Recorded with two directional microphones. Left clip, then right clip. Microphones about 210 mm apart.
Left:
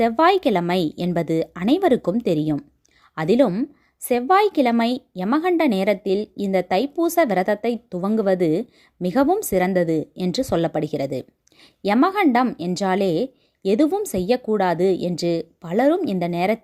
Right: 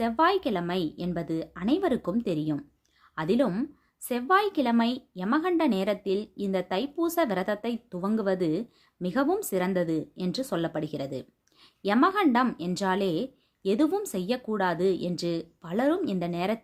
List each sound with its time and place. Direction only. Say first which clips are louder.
0.0 s a woman's voice: left 8 dB; 35° left (ahead or behind)